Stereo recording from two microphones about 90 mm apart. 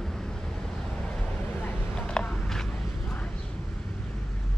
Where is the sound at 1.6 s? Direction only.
10° left (ahead or behind).